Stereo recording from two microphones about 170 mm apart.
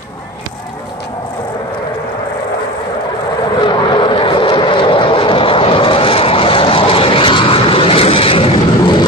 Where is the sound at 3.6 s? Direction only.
30° left (ahead or behind).